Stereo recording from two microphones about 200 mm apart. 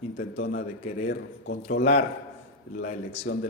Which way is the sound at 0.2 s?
55° left (ahead or behind).